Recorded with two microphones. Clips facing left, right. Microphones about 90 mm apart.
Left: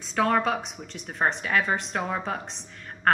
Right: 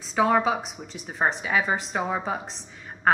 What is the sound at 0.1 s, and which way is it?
A woman's voice, 5° right (ahead or behind).